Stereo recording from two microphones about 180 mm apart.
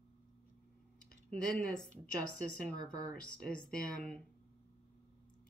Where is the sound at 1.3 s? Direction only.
5° left (ahead or behind).